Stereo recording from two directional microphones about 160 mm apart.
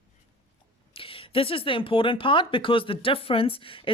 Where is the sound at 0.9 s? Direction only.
35° left (ahead or behind).